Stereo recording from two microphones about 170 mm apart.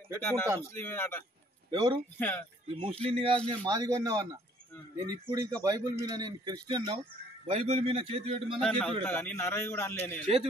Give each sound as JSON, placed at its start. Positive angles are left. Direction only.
{"t": 0.2, "sound": "a man's voice", "side_deg": 10}
{"t": 1.7, "sound": "speech", "side_deg": -25}
{"t": 2.1, "sound": "a man's voice", "side_deg": 10}
{"t": 2.7, "sound": "a man's voice", "side_deg": -35}
{"t": 8.6, "sound": "a man's voice", "side_deg": 5}